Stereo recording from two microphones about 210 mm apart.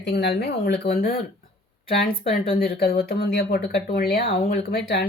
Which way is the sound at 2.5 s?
50° left (ahead or behind).